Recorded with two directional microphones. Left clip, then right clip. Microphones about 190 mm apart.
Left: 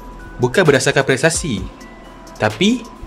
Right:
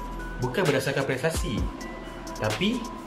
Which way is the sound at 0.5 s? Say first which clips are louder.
Left 12 dB; 60° left (ahead or behind).